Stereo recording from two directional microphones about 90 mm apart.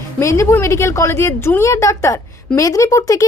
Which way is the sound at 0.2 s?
35° left (ahead or behind).